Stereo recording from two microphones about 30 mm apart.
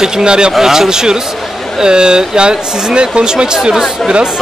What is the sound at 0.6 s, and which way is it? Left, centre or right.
Speech, centre.